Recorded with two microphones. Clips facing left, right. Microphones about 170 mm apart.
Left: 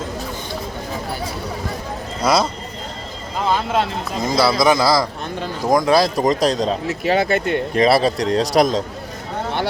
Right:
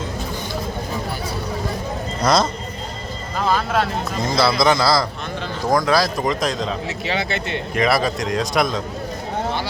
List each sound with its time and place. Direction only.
2.2 s a man's voice: 5° left (ahead or behind)
3.3 s a man's voice: 20° left (ahead or behind)
6.2 s a man's voice: 40° left (ahead or behind)
6.8 s speech: 50° left (ahead or behind)
7.7 s a man's voice: 30° left (ahead or behind)